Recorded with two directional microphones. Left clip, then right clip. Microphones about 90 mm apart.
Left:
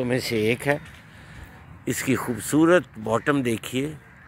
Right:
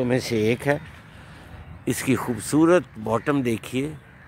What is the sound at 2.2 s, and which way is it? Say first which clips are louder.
Speech: even; centre (ahead or behind).